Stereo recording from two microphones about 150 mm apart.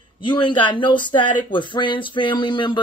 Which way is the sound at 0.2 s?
30° left (ahead or behind).